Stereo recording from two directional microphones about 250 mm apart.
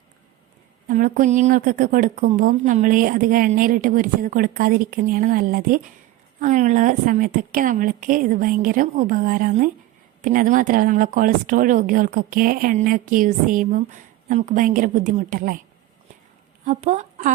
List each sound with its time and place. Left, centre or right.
0.9 s speech: right
16.6 s speech: right